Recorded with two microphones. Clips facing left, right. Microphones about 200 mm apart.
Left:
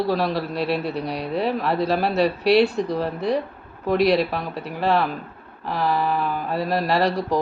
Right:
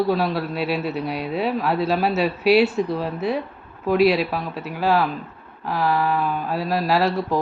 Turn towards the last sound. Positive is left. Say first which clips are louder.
# even
turn(degrees=-5)  # may be behind; listen again after turning